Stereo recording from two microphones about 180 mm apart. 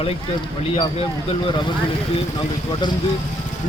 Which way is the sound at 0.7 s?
30° left (ahead or behind).